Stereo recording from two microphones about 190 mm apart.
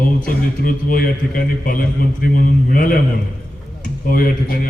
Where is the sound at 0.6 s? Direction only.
45° left (ahead or behind).